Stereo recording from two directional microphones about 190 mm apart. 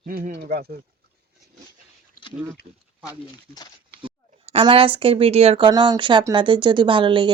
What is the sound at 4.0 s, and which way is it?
Speech, 30° right (ahead or behind).